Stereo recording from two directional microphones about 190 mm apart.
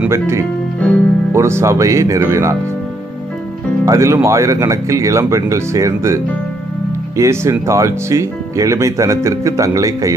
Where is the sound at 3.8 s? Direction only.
15° right (ahead or behind).